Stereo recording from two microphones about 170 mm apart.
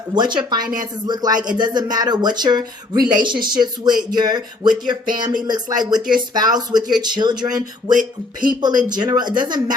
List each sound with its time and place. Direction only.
0.1 s speech: 25° right (ahead or behind)
7.9 s a sound: 55° right (ahead or behind)
8.6 s speech: 25° right (ahead or behind)